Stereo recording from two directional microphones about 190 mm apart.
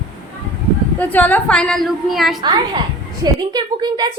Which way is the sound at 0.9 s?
10° left (ahead or behind).